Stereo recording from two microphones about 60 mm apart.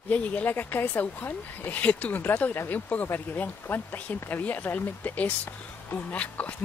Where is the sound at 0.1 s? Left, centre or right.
Left.